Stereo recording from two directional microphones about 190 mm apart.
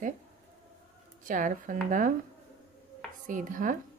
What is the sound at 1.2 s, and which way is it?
Speech, 45° right (ahead or behind).